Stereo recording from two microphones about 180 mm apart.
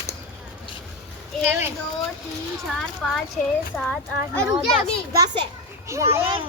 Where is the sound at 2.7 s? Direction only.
Centre (ahead or behind).